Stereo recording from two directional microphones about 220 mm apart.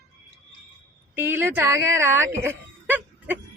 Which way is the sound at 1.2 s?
10° right (ahead or behind).